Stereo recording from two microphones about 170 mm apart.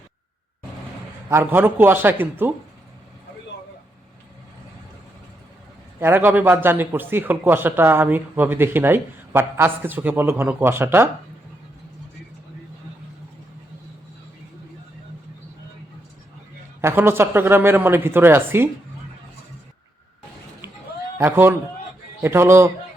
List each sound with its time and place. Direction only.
1.3 s a man's voice: 10° right (ahead or behind)
6.0 s a man's voice: 15° right (ahead or behind)
16.8 s a man's voice: 15° right (ahead or behind)
21.2 s a man's voice: 10° right (ahead or behind)